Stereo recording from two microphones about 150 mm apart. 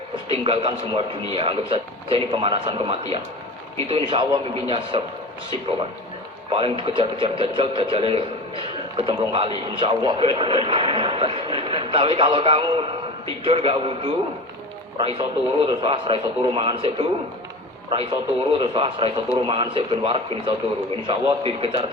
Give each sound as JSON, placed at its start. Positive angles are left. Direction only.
{"t": 0.3, "sound": "speech", "side_deg": -40}
{"t": 6.5, "sound": "speech", "side_deg": -35}